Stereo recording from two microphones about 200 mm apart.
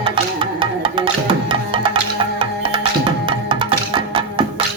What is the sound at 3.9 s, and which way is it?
Music, 25° right (ahead or behind).